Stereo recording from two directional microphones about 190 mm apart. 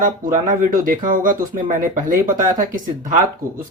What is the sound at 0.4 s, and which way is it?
Speech, 45° right (ahead or behind).